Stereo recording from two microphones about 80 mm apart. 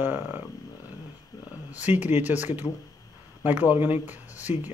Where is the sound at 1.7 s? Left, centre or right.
Right.